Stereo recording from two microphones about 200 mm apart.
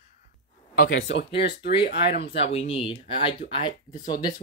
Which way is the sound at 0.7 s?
45° left (ahead or behind).